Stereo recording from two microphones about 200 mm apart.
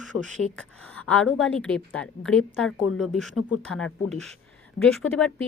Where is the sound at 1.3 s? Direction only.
5° left (ahead or behind).